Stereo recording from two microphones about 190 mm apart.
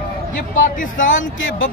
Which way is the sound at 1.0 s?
90° left.